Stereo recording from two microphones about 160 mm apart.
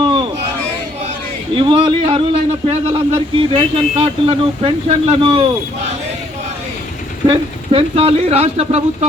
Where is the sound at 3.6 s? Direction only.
35° right (ahead or behind).